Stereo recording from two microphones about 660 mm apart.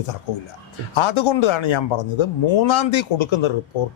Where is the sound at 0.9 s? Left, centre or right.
Left.